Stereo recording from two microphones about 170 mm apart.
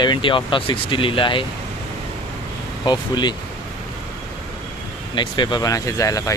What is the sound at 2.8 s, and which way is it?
Speech, 25° left (ahead or behind).